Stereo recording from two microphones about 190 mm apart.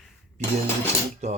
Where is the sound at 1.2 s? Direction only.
35° right (ahead or behind).